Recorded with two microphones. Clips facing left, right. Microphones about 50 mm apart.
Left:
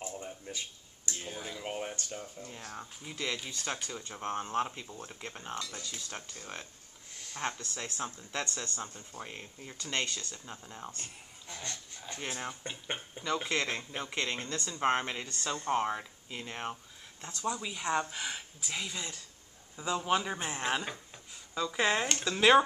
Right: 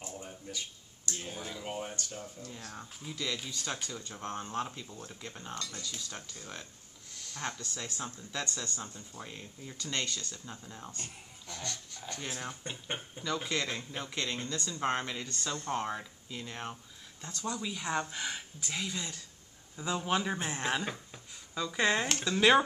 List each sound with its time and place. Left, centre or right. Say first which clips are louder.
0.5 s a sound: even; left
1.1 s speech: even; centre
1.6 s speech: left 2 dB; left
12.1 s speech: left 1 dB; centre